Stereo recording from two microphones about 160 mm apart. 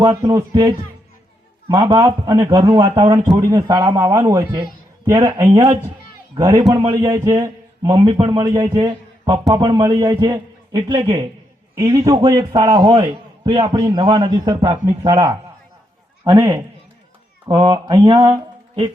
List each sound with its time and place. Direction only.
0.0 s a man's voice: 20° right (ahead or behind)